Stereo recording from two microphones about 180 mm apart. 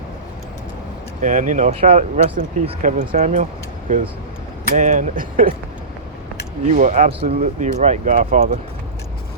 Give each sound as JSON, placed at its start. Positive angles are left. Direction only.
{"t": 1.2, "sound": "speech", "side_deg": -45}
{"t": 6.7, "sound": "speech", "side_deg": -45}